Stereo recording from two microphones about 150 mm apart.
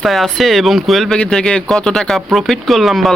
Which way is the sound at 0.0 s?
Centre (ahead or behind).